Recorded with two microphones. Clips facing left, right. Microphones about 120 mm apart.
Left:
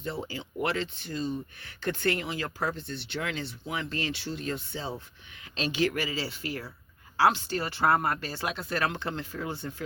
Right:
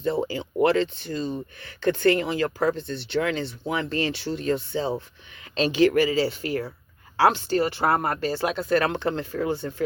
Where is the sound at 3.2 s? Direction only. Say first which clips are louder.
Right 8 dB; 45° right (ahead or behind).